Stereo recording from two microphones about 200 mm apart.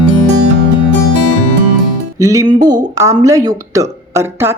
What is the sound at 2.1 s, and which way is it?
A woman's voice, 15° right (ahead or behind).